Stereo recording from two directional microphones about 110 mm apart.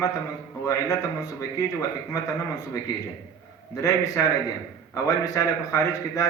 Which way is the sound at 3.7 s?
30° left (ahead or behind).